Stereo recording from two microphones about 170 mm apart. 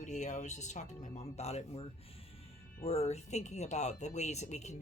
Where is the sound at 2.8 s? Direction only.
35° left (ahead or behind).